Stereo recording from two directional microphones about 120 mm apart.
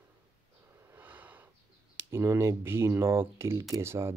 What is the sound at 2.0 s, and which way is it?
Speech, 20° right (ahead or behind).